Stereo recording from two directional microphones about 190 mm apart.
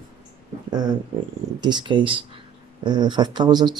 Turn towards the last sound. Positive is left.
turn(degrees=-20)  # may be behind; listen again after turning